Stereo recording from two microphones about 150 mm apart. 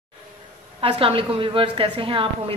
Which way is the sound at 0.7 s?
40° right (ahead or behind).